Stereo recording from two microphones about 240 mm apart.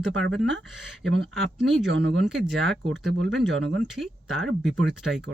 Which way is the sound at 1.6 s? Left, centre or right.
Right.